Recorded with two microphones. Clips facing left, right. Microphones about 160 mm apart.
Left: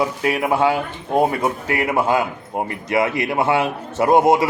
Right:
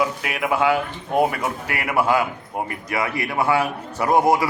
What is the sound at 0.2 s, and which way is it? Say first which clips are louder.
A man's voice: left 4 dB; 35° left (ahead or behind).